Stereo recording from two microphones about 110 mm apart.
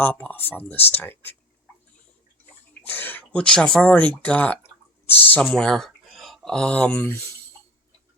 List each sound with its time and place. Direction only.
0.0 s speech: 15° left (ahead or behind)
2.8 s speech: 15° left (ahead or behind)
5.5 s speech: 5° left (ahead or behind)